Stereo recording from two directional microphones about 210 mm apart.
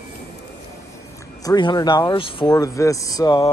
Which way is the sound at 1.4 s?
20° left (ahead or behind).